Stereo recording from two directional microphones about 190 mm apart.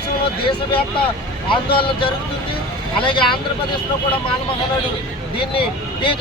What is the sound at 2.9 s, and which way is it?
Speech, 25° left (ahead or behind).